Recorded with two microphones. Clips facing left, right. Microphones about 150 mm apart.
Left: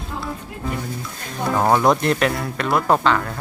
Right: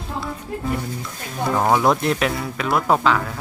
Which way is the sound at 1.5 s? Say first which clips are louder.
Left 1 dB; centre (ahead or behind).